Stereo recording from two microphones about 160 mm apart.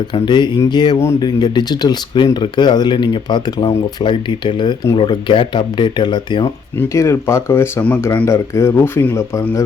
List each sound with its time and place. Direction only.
0.1 s speech: 30° left (ahead or behind)